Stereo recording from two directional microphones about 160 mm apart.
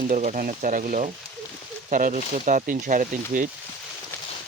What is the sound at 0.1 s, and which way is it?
Speech, 50° right (ahead or behind).